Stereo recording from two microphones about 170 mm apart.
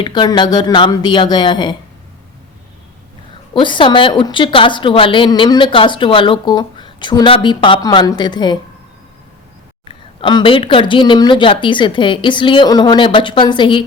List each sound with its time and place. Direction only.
0.0 s a woman's voice: 25° left (ahead or behind)
3.5 s a woman's voice: 30° left (ahead or behind)
9.9 s a woman's voice: 30° left (ahead or behind)